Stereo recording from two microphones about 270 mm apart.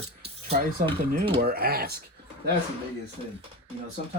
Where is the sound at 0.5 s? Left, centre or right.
Right.